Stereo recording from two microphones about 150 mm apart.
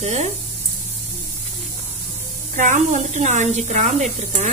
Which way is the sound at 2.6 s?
55° right (ahead or behind).